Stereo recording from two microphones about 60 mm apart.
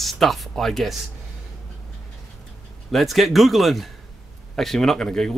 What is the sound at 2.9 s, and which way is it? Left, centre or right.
Speech, centre.